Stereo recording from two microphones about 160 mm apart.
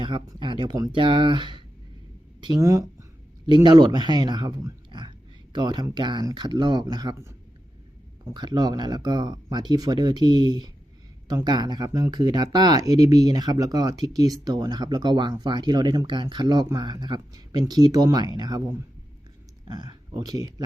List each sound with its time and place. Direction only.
0.0 s speech: 30° right (ahead or behind)